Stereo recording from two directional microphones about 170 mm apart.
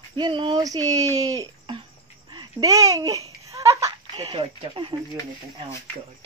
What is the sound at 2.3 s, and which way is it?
Laughter, 25° right (ahead or behind).